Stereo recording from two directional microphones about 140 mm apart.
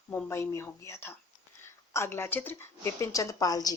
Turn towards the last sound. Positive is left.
turn(degrees=25)  # may be behind; listen again after turning